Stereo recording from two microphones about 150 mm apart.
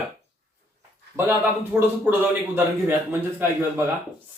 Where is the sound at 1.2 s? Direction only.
15° right (ahead or behind).